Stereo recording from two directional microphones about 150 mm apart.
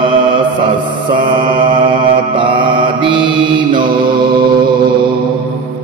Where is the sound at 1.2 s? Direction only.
35° right (ahead or behind).